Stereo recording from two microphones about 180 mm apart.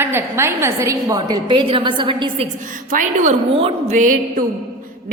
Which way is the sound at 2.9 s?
45° right (ahead or behind).